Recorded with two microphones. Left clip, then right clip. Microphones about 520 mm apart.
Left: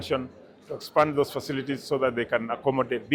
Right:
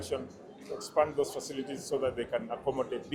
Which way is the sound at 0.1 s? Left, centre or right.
Left.